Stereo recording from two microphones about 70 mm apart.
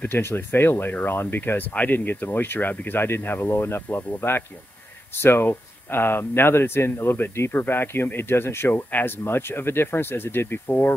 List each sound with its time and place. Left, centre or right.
0.0 s speech: left